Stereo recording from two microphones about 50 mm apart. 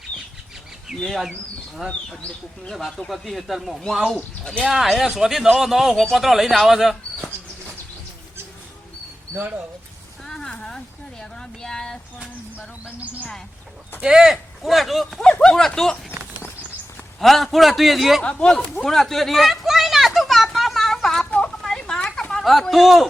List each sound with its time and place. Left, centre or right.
0.9 s speech: centre
3.1 s speech: centre
9.3 s speech: right
10.2 s speech: centre
12.8 s speech: right
14.0 s speech: centre
15.2 s a sound: centre
15.5 s speech: centre
17.2 s speech: centre
18.2 s speech: centre
18.9 s a sound: centre
22.7 s speech: centre